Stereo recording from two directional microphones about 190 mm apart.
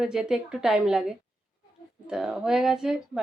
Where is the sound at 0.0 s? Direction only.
5° right (ahead or behind).